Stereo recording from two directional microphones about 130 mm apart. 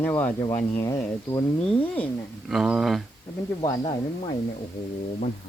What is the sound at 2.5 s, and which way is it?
Speech, 5° right (ahead or behind).